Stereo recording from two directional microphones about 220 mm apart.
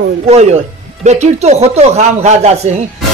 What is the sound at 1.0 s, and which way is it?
A woman's voice, 30° right (ahead or behind).